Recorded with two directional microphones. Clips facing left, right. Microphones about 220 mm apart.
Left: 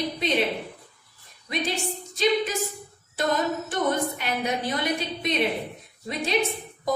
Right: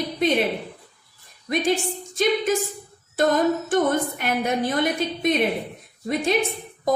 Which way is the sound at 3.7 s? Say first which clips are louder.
Right 5 dB; 50° right (ahead or behind).